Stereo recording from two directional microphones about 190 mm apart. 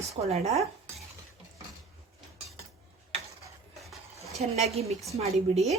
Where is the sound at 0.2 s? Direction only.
35° right (ahead or behind).